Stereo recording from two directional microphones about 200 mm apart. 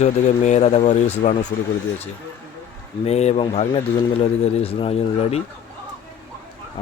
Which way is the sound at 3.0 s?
30° left (ahead or behind).